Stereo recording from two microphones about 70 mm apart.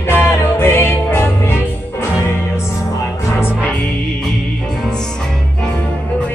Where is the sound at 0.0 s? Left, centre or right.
Left.